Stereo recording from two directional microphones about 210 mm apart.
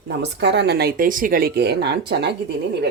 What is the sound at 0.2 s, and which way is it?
Speech, 55° right (ahead or behind).